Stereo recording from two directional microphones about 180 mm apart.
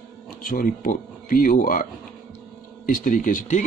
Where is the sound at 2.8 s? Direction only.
50° left (ahead or behind).